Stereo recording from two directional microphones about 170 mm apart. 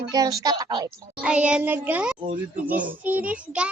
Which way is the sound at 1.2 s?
5° right (ahead or behind).